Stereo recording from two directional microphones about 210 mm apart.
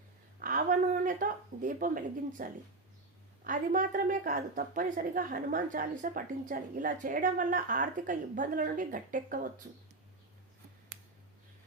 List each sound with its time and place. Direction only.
0.4 s a woman's voice: 40° right (ahead or behind)